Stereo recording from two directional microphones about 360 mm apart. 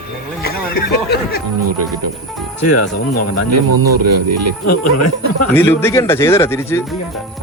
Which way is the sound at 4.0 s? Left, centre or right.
Right.